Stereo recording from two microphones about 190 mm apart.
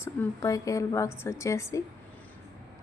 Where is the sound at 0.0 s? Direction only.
15° left (ahead or behind).